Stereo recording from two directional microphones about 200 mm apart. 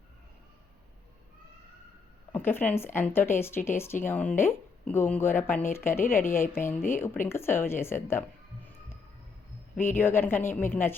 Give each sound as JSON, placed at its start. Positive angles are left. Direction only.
{"t": 2.3, "sound": "speech", "side_deg": 10}
{"t": 6.1, "sound": "a woman's voice", "side_deg": 40}
{"t": 6.8, "sound": "speech", "side_deg": 10}
{"t": 9.8, "sound": "speech", "side_deg": 10}